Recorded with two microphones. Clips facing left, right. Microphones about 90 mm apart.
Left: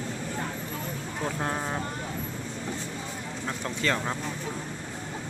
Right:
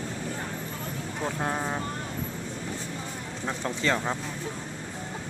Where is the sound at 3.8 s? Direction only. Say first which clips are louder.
Right 1 dB; 25° right (ahead or behind).